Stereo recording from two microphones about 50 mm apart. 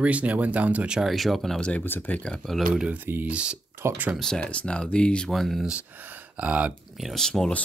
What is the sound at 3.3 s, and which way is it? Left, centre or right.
Speech, centre.